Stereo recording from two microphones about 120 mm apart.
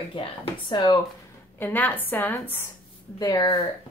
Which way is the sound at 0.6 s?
35° left (ahead or behind).